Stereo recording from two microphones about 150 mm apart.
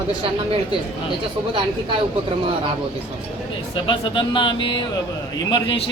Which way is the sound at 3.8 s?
35° left (ahead or behind).